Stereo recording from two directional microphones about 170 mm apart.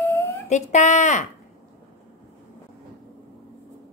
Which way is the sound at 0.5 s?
45° left (ahead or behind).